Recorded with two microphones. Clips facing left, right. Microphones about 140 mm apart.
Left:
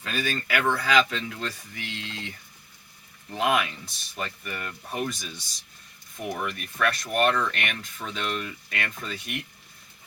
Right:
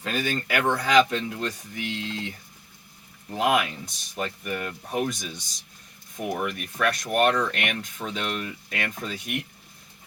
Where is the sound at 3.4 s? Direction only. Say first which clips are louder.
Right 2 dB; 15° right (ahead or behind).